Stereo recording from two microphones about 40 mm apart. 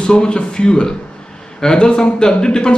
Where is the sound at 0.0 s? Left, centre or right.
Left.